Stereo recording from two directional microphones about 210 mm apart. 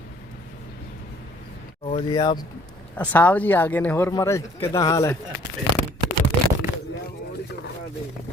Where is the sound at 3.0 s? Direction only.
10° left (ahead or behind).